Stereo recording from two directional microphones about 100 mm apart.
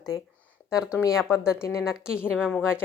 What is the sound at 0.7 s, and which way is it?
Speech, 5° right (ahead or behind).